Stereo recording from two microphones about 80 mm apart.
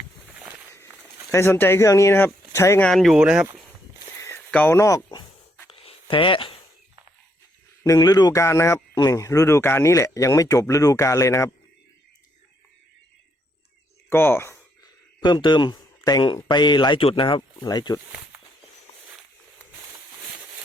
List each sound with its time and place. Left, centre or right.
0.3 s walk: right
1.3 s speech: left
2.9 s speech: centre
3.2 s speech: centre
4.7 s speech: left
6.1 s speech: left
7.9 s speech: left
14.1 s speech: left
15.2 s speech: left
16.0 s speech: left
16.4 s speech: left
17.6 s speech: left